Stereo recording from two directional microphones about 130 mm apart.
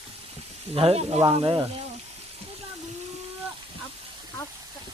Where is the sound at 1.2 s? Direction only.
40° right (ahead or behind).